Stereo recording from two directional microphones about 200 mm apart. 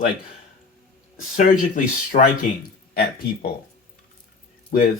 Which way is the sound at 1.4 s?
40° left (ahead or behind).